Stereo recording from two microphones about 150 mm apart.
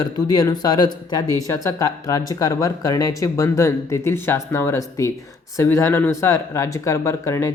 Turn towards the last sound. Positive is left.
turn(degrees=20)  # may be behind; listen again after turning